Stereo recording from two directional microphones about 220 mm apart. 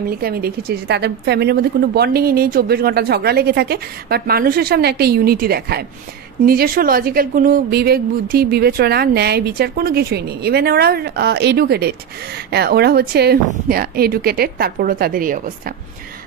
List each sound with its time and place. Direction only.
0.1 s a woman's voice: 45° right (ahead or behind)